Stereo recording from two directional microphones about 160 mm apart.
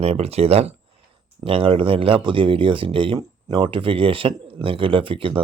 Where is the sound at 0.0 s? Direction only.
40° right (ahead or behind).